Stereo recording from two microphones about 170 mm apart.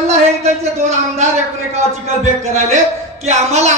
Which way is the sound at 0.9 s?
40° right (ahead or behind).